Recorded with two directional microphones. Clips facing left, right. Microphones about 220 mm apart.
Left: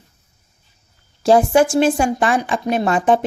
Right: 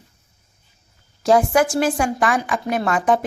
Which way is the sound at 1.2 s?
30° left (ahead or behind).